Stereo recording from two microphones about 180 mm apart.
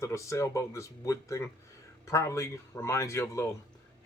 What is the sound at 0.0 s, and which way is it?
Speech, 15° left (ahead or behind).